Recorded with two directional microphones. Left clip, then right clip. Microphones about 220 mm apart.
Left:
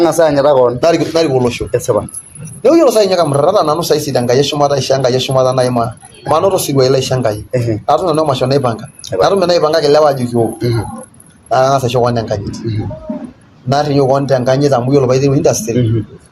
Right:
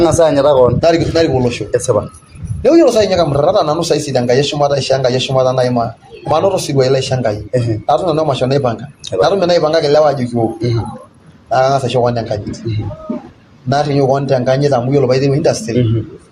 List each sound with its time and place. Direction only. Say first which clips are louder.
0.0 s speech: even; 10° left (ahead or behind)
0.8 s speech: even; 45° left (ahead or behind)
1.7 s speech: right 1 dB; 10° left (ahead or behind)
2.6 s speech: left 1 dB; 45° left (ahead or behind)
10.6 s speech: left 2 dB; 10° left (ahead or behind)
11.4 s speech: left 1 dB; 45° left (ahead or behind)
13.7 s speech: left 1 dB; 45° left (ahead or behind)